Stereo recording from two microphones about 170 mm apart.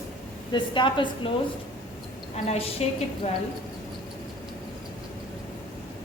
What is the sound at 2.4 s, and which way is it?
Speech, 35° left (ahead or behind).